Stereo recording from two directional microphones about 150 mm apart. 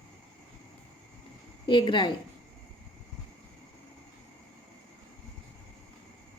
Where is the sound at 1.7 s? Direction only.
30° left (ahead or behind).